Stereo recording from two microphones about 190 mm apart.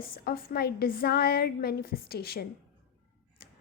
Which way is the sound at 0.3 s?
55° left (ahead or behind).